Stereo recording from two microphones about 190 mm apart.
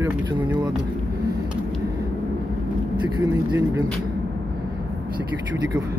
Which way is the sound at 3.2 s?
10° right (ahead or behind).